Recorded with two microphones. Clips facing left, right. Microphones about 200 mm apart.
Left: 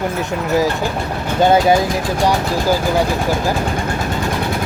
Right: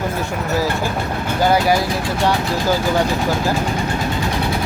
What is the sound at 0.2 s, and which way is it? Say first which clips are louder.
Speech: left 6 dB; 20° left (ahead or behind).